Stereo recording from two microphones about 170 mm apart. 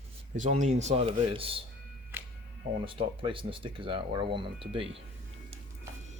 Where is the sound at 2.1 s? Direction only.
10° right (ahead or behind).